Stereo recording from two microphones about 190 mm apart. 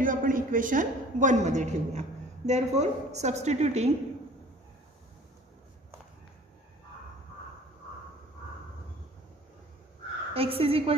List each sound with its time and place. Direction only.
0.0 s a woman's voice: 45° right (ahead or behind)
10.3 s a woman's voice: 30° right (ahead or behind)